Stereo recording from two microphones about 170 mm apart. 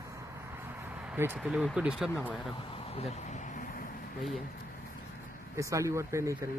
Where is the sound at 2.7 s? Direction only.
35° left (ahead or behind); by 3.9 s 50° left (ahead or behind).